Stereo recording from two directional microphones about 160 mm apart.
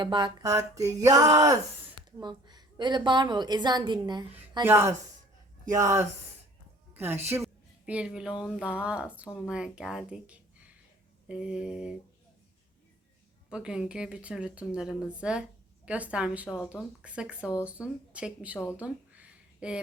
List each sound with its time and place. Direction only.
0.0 s a woman's voice: 30° right (ahead or behind)
4.6 s a woman's voice: 15° right (ahead or behind)
13.5 s a woman's voice: 5° right (ahead or behind)